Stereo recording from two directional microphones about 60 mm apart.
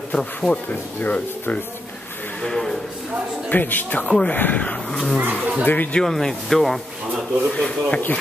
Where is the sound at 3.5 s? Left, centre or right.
Left.